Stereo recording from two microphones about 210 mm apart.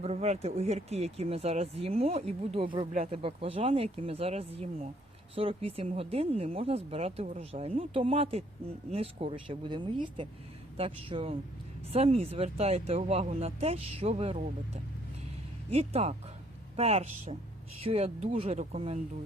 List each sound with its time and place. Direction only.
0.0 s speech: 30° right (ahead or behind)